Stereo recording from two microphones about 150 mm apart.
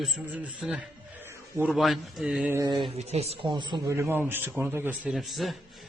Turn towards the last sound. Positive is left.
turn(degrees=0)  # may be behind; listen again after turning